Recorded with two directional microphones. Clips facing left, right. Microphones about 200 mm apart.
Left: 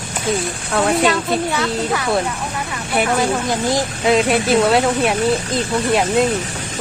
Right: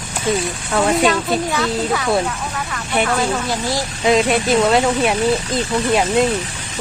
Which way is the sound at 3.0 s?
15° left (ahead or behind).